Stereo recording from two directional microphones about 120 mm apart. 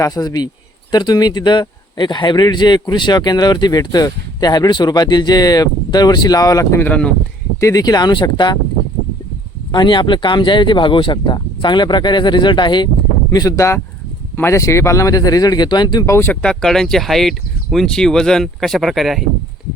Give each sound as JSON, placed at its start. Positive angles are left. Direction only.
{"t": 0.0, "sound": "speech", "side_deg": 30}
{"t": 6.8, "sound": "speech", "side_deg": 10}
{"t": 7.6, "sound": "speech", "side_deg": 30}
{"t": 9.7, "sound": "speech", "side_deg": 40}
{"t": 13.3, "sound": "speech", "side_deg": 30}
{"t": 16.0, "sound": "speech", "side_deg": 20}
{"t": 16.4, "sound": "speech", "side_deg": 5}